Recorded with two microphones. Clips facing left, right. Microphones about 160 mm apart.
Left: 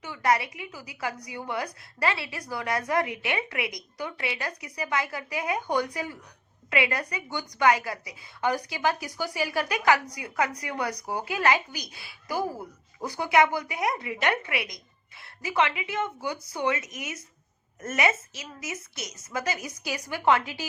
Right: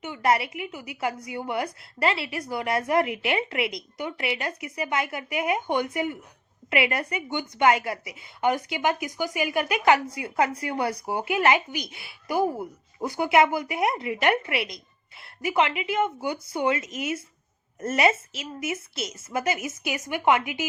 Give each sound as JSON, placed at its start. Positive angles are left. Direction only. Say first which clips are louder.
{"t": 0.0, "sound": "a woman's voice", "louder": "right 2 dB", "side_deg": -25}